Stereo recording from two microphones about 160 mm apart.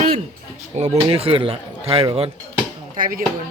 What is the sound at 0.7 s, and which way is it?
Speech, 45° right (ahead or behind).